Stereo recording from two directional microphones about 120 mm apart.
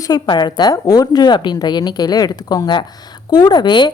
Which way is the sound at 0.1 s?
35° left (ahead or behind).